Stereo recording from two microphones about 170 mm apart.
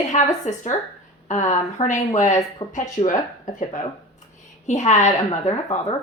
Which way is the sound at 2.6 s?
30° left (ahead or behind).